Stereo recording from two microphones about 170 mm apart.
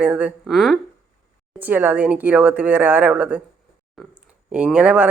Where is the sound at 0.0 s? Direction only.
10° right (ahead or behind).